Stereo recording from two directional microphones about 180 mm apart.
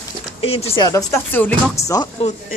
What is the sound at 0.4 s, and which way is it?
Speech, 35° left (ahead or behind).